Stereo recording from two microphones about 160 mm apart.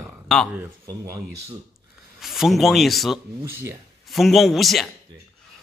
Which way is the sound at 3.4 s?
15° right (ahead or behind).